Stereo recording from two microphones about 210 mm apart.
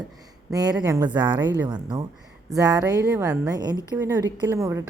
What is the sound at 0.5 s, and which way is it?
A woman's voice, 20° right (ahead or behind).